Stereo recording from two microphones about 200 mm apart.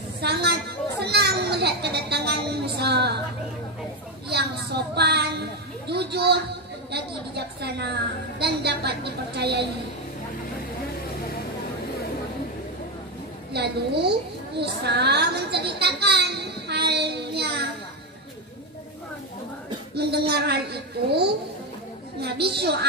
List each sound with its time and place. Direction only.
0.2 s children playing: 55° right (ahead or behind)
4.3 s a woman's voice: 55° right (ahead or behind)
13.5 s a woman's voice: 55° right (ahead or behind)
14.6 s a sound: 55° right (ahead or behind)
20.0 s a woman's voice: 55° right (ahead or behind)